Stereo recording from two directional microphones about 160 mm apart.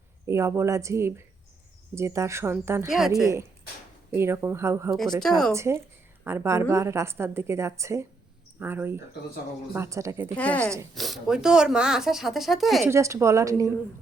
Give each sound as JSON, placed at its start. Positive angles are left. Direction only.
{"t": 0.3, "sound": "a woman's voice", "side_deg": -20}
{"t": 4.1, "sound": "a woman's voice", "side_deg": -15}
{"t": 5.2, "sound": "speech", "side_deg": 5}
{"t": 5.5, "sound": "a woman's voice", "side_deg": -15}
{"t": 10.3, "sound": "a woman's voice", "side_deg": 10}
{"t": 12.8, "sound": "a woman's voice", "side_deg": -15}